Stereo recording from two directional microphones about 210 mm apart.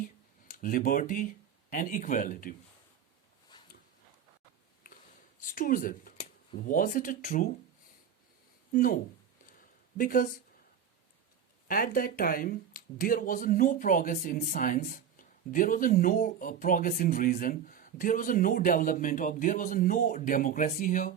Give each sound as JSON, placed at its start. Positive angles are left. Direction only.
{"t": 0.6, "sound": "speech", "side_deg": 40}
{"t": 3.5, "sound": "a sound", "side_deg": 20}
{"t": 5.4, "sound": "speech", "side_deg": 40}
{"t": 8.7, "sound": "speech", "side_deg": 40}
{"t": 10.0, "sound": "speech", "side_deg": 40}
{"t": 11.7, "sound": "speech", "side_deg": 45}